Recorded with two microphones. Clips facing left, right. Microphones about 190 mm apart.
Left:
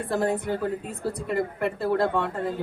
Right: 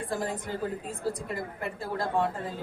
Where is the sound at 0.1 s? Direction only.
65° left (ahead or behind).